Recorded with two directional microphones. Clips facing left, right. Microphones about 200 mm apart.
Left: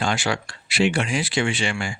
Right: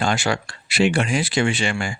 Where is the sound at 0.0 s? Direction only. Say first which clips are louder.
Right 2 dB; 45° right (ahead or behind).